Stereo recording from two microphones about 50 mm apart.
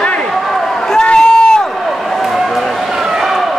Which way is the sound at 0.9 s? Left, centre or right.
Centre.